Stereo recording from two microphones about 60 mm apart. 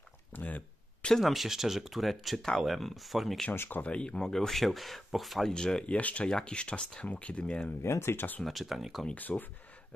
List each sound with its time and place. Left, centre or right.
0.3 s a sound: left
1.2 s speech: centre
3.5 s speech: left
3.8 s speech: centre
5.5 s speech: centre
7.8 s speech: left
8.5 s speech: centre
9.1 s speech: left